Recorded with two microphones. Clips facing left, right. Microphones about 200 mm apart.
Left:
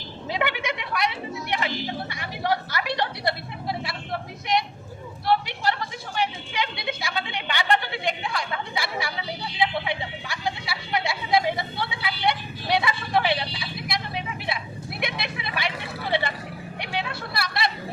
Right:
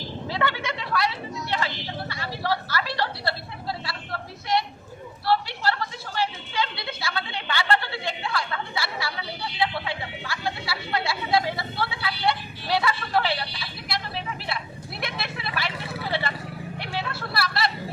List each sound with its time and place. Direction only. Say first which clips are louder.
0.3 s a sound: left 1 dB; 15° left (ahead or behind)
15.0 s vehicle: left 1 dB; 15° left (ahead or behind)
17.1 s vehicle: right 2 dB; 15° left (ahead or behind)